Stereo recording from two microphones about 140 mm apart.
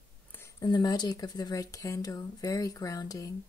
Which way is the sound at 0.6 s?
30° left (ahead or behind).